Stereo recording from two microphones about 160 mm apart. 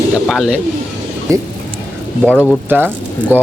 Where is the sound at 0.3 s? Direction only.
5° right (ahead or behind).